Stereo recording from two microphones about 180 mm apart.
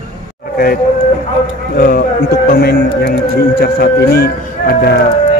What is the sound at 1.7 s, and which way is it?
Speech, 55° left (ahead or behind).